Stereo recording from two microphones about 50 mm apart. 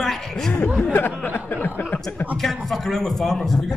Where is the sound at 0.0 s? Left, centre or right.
Centre.